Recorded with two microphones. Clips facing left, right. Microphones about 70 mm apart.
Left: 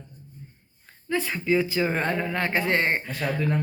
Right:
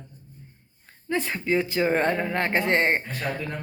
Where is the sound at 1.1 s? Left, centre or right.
Right.